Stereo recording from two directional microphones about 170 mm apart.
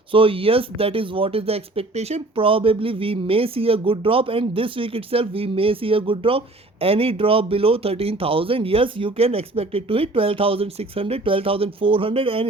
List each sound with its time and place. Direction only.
0.1 s speech: 30° right (ahead or behind)